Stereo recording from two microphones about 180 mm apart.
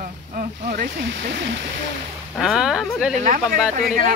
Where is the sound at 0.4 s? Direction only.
50° right (ahead or behind).